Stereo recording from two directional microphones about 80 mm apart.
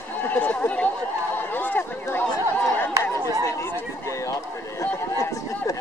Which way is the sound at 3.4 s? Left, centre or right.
Left.